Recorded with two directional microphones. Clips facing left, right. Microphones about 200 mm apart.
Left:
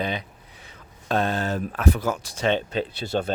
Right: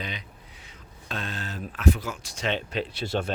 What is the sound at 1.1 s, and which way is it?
Speech, 55° left (ahead or behind).